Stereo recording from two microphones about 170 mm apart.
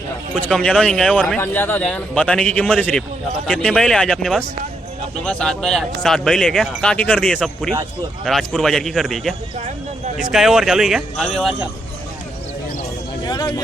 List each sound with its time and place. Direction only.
0.4 s a man's voice: 5° left (ahead or behind)
10.3 s a man's voice: centre (ahead or behind)
13.2 s speech: 25° left (ahead or behind)